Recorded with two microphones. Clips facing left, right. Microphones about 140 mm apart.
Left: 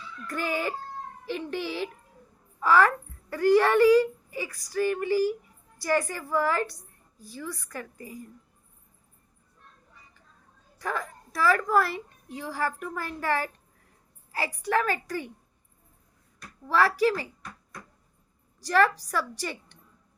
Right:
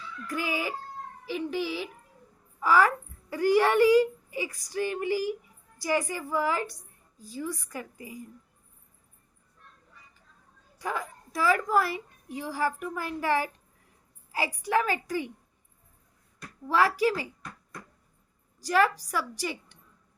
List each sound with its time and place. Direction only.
0.3 s a woman's voice: 10° right (ahead or behind)
10.8 s a woman's voice: 15° right (ahead or behind)
16.6 s a woman's voice: 15° right (ahead or behind)
18.6 s a woman's voice: 15° right (ahead or behind)